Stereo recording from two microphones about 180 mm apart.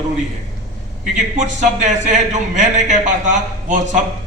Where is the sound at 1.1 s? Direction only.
45° right (ahead or behind).